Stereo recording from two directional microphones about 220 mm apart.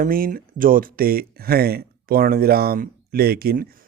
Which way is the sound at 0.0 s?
40° right (ahead or behind).